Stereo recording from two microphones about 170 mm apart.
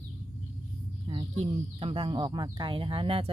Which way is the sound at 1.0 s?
30° right (ahead or behind).